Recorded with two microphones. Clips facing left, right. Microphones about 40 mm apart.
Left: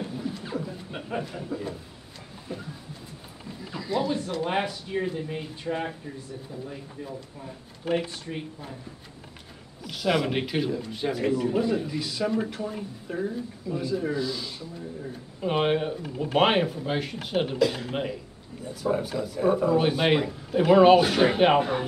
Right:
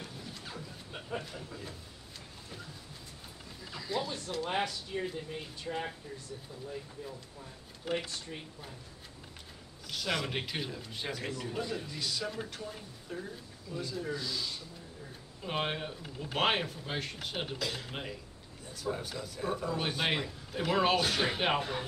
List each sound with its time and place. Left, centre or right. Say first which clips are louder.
0.0 s a sound: left 11 dB; left
1.2 s a man's voice: left 11 dB; centre
3.7 s a sound: left 8 dB; centre
4.4 s speech: left 6 dB; left
5.7 s speech: left 7 dB; left
8.0 s speech: left 7 dB; left
9.8 s a man's voice: left 9 dB; centre
12.6 s speech: left 10 dB; left
13.7 s a man's voice: left 9 dB; centre